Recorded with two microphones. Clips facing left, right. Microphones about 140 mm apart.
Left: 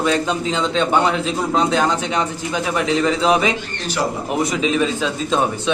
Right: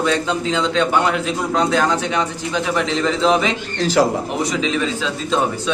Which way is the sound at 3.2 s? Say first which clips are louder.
Right 2 dB; 10° left (ahead or behind).